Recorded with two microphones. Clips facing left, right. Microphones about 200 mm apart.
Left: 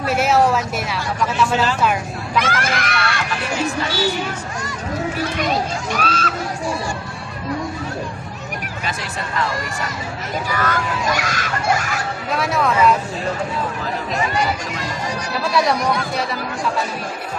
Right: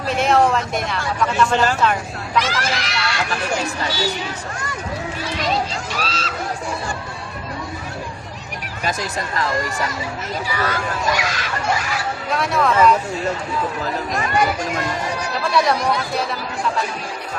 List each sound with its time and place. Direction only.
0.1 s speech: 5° left (ahead or behind)
2.4 s speech: 55° left (ahead or behind)
5.9 s speech: 55° left (ahead or behind)
10.5 s speech: 45° left (ahead or behind)
12.3 s speech: centre (ahead or behind)
14.3 s speech: 55° right (ahead or behind)
15.5 s speech: centre (ahead or behind)